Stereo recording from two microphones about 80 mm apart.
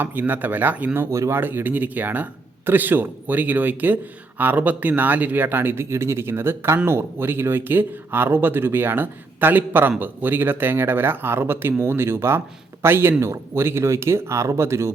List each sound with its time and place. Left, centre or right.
0.0 s speech: right
1.1 s speech: right
1.4 s speech: right